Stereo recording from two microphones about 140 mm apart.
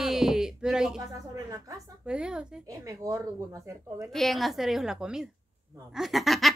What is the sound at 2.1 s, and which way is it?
Laughter, 5° right (ahead or behind).